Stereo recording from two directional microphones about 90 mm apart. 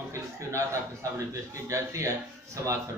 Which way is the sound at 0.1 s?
35° right (ahead or behind).